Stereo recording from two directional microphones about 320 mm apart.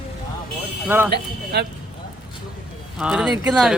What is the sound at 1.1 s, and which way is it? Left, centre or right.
Speech, right.